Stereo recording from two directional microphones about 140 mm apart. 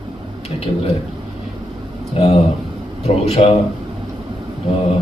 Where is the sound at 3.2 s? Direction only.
45° left (ahead or behind).